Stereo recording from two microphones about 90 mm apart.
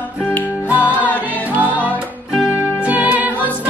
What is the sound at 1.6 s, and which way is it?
Music, 20° right (ahead or behind).